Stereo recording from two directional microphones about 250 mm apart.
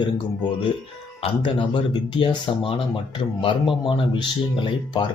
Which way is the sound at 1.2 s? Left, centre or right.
Centre.